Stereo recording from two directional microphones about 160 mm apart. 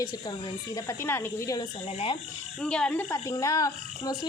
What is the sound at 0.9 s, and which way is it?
Speech, 15° left (ahead or behind).